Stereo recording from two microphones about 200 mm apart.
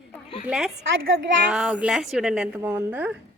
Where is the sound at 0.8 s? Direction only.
75° right (ahead or behind).